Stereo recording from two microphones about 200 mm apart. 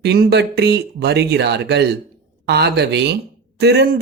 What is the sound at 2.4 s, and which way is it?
Speech, 55° right (ahead or behind).